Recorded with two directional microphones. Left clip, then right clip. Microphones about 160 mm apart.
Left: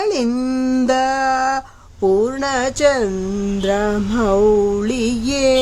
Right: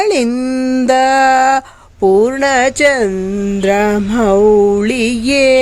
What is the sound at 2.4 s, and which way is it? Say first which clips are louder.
Music: right 6 dB; 15° right (ahead or behind).